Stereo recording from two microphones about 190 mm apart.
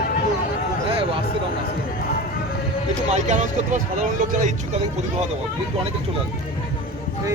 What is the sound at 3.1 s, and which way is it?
Speech, 40° right (ahead or behind).